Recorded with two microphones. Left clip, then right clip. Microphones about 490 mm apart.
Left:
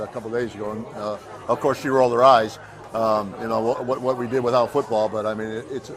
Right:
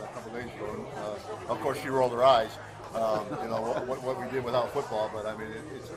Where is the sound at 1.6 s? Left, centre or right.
Left.